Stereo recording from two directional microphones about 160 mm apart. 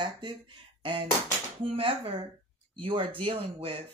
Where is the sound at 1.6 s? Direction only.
35° right (ahead or behind).